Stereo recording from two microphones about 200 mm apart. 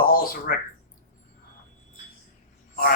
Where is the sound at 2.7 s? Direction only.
45° left (ahead or behind).